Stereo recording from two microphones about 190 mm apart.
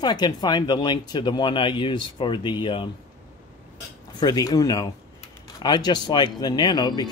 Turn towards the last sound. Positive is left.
turn(degrees=20)  # may be behind; listen again after turning